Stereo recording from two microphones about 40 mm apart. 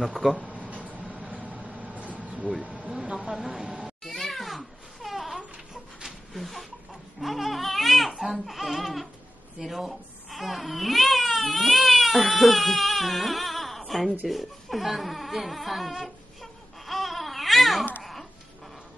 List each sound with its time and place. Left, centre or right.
0.0 s speech: centre
0.4 s a sound: right
1.9 s vehicle: right
2.9 s vehicle: right
4.0 s crying: centre
6.0 s a sound: centre
7.2 s crying: centre
8.5 s a sound: centre
9.6 s baby cry: centre
14.2 s speech: centre
16.8 s babbling: centre